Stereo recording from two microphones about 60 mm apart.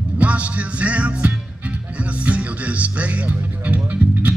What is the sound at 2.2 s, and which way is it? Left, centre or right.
Speech, right.